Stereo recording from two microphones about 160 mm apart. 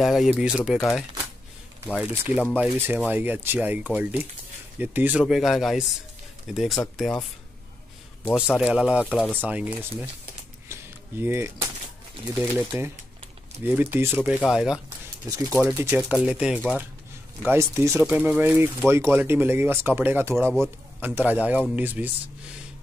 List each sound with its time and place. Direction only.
0.0 s speech: centre (ahead or behind)
2.0 s speech: 10° right (ahead or behind)
8.4 s speech: 5° right (ahead or behind)
9.4 s speech: 10° right (ahead or behind)
10.7 s cap gun: 15° right (ahead or behind)
12.4 s speech: 15° right (ahead or behind)
15.3 s speech: 20° right (ahead or behind)
15.6 s speech: 10° right (ahead or behind)
18.0 s speech: 5° right (ahead or behind)